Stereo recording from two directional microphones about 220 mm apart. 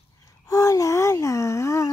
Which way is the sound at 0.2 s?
15° left (ahead or behind).